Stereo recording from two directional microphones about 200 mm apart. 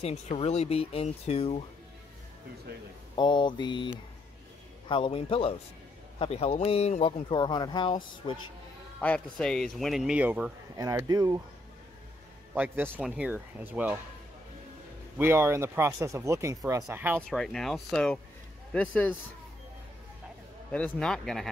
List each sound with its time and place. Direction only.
0.0 s speech: 30° left (ahead or behind)
3.2 s speech: 25° left (ahead or behind)
9.0 s speech: 5° left (ahead or behind)
10.8 s speech: 15° right (ahead or behind)
12.5 s speech: 10° right (ahead or behind)
15.1 s speech: 10° right (ahead or behind); by 19.1 s 5° left (ahead or behind)
20.7 s speech: 5° left (ahead or behind)